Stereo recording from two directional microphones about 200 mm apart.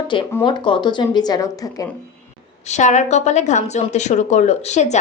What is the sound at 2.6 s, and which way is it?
A woman's voice, 35° left (ahead or behind).